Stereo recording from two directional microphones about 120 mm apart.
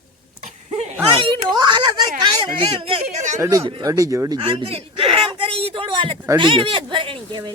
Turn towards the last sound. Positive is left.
turn(degrees=-40)  # may be behind; listen again after turning